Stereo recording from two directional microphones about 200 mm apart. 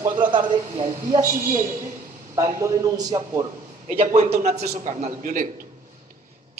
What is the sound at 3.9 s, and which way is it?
A man's voice, 35° right (ahead or behind).